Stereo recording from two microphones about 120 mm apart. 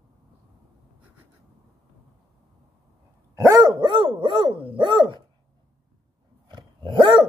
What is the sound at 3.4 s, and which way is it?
Dog, 30° right (ahead or behind).